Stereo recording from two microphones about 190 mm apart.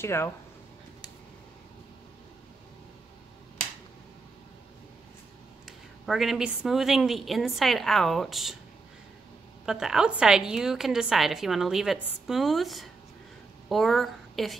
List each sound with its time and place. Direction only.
0.0 s speech: 15° left (ahead or behind)
5.7 s a woman's voice: centre (ahead or behind)
9.7 s a woman's voice: 5° right (ahead or behind)